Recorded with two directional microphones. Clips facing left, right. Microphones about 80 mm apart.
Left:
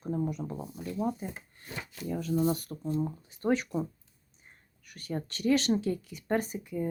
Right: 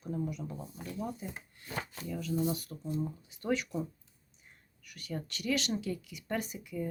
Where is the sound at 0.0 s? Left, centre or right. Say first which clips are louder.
Left 4 dB; left.